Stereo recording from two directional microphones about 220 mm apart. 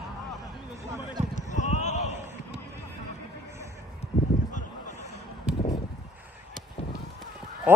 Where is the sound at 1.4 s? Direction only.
35° left (ahead or behind).